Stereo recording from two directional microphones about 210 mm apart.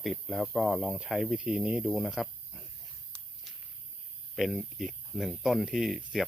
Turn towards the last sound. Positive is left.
turn(degrees=0)  # may be behind; listen again after turning